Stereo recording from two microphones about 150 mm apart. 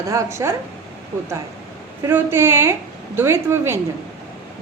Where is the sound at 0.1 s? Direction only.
20° right (ahead or behind).